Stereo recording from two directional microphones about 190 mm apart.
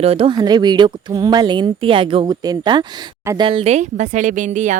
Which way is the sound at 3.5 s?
30° right (ahead or behind).